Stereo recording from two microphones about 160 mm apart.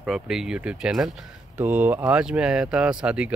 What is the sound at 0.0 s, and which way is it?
Speech, centre (ahead or behind).